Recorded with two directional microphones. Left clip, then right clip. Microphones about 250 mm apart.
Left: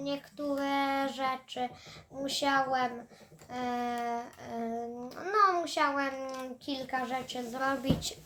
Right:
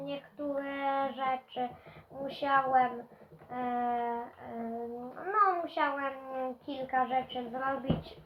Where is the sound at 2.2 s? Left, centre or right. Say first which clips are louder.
Even; left.